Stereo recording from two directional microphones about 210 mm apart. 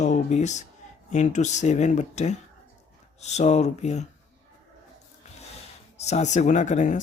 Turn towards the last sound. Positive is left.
turn(degrees=35)  # may be behind; listen again after turning